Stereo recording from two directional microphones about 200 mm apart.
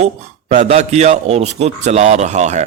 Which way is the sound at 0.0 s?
35° right (ahead or behind).